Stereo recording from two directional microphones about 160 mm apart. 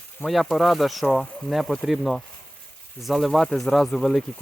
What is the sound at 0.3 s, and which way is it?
Speech, centre (ahead or behind).